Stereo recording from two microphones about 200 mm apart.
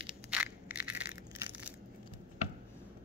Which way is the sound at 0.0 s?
5° right (ahead or behind).